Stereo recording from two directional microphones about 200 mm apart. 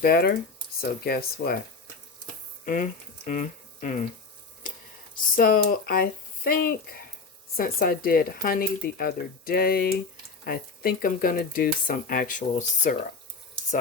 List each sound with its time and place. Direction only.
0.0 s speech: 50° left (ahead or behind)
2.6 s speech: 40° left (ahead or behind)
5.1 s speech: 45° left (ahead or behind)